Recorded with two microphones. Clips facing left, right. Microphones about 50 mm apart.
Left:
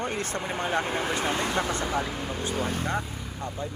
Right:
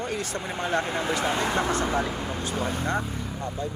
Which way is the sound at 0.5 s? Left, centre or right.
Centre.